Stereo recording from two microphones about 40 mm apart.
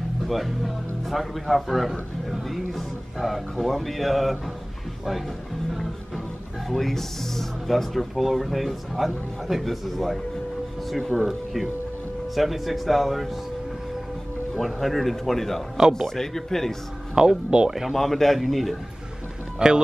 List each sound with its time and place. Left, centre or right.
0.3 s speech: centre
6.7 s speech: centre
12.4 s speech: centre
14.6 s speech: centre
17.1 s speech: centre
17.9 s speech: centre
19.6 s speech: right